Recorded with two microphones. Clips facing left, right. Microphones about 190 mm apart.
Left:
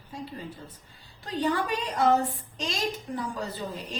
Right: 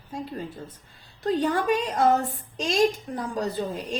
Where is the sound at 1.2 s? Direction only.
45° right (ahead or behind).